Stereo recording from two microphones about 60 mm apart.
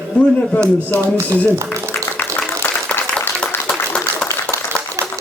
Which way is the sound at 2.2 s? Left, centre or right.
Left.